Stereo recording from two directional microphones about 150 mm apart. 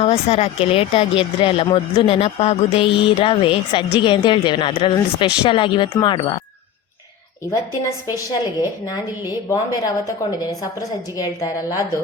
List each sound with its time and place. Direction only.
0.0 s speech: 45° left (ahead or behind)
8.1 s a woman's voice: 25° left (ahead or behind)